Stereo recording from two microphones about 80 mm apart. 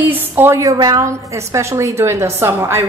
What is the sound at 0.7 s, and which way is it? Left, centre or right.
A woman's voice, right.